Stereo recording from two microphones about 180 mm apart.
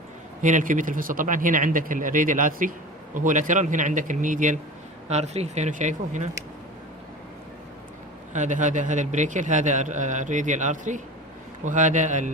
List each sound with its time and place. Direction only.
0.4 s a man's voice: 45° right (ahead or behind)
8.3 s a man's voice: 45° right (ahead or behind)